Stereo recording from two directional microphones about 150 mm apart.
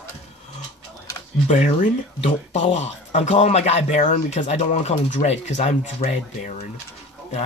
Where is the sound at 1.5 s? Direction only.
55° left (ahead or behind).